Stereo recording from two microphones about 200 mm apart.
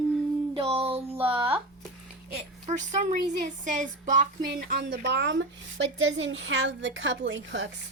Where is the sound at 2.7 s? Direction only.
35° right (ahead or behind).